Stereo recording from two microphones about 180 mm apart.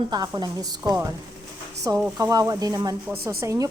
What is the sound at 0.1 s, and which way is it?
Speech, 25° right (ahead or behind).